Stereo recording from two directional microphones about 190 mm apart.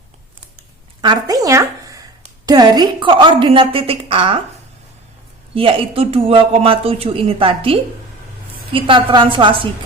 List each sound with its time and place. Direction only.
1.0 s a woman's voice: 20° right (ahead or behind)
5.5 s speech: 30° right (ahead or behind)